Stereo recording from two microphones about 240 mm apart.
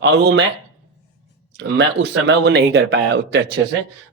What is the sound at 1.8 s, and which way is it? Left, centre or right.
Speech, right.